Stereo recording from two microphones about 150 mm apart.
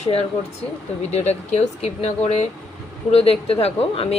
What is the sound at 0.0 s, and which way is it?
Speech, 40° left (ahead or behind).